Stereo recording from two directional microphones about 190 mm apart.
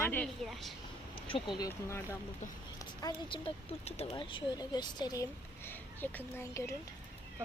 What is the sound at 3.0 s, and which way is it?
Speech, 30° left (ahead or behind).